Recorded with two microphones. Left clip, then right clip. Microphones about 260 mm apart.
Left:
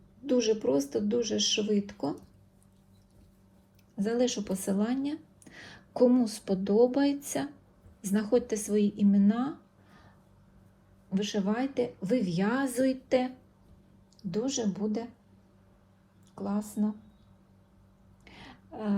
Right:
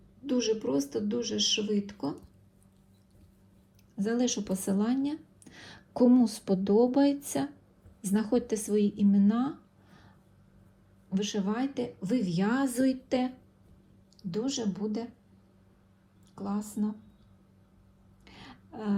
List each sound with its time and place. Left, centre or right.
0.3 s speech: centre
3.9 s speech: centre
11.1 s speech: centre
16.3 s speech: centre
18.3 s a sound: centre